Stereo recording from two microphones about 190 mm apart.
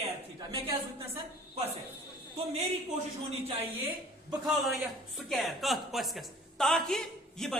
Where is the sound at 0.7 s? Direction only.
30° right (ahead or behind).